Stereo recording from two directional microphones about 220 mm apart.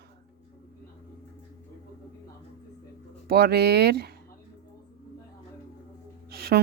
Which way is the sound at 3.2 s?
45° right (ahead or behind).